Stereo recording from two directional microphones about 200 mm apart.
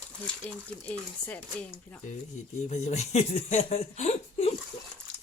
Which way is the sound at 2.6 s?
35° left (ahead or behind).